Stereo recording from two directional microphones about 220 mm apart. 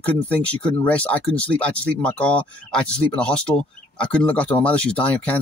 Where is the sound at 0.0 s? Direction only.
5° left (ahead or behind).